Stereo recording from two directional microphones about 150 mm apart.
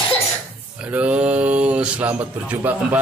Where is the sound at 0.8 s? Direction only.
10° right (ahead or behind).